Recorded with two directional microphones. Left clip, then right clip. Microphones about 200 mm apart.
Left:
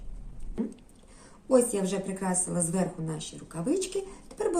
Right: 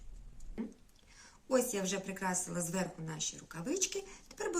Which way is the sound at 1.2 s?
Centre (ahead or behind).